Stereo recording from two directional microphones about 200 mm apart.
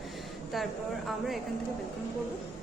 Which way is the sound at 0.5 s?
Centre (ahead or behind).